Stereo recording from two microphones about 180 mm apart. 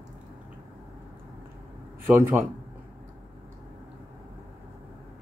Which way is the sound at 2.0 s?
10° right (ahead or behind).